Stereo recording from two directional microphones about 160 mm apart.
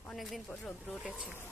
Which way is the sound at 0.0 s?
Centre (ahead or behind).